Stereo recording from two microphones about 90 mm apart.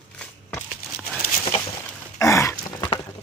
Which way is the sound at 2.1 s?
35° left (ahead or behind).